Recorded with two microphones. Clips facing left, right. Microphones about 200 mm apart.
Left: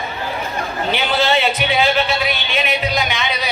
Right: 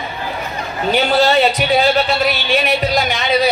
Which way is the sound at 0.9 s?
40° right (ahead or behind).